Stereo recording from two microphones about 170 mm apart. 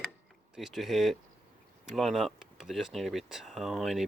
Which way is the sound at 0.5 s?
Centre (ahead or behind).